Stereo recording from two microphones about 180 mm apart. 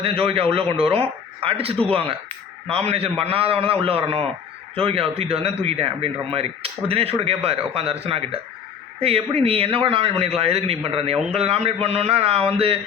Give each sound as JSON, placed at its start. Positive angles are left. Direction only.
{"t": 0.0, "sound": "a man's voice", "side_deg": -30}